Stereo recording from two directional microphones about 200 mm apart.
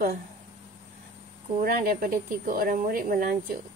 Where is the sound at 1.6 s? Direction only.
45° right (ahead or behind).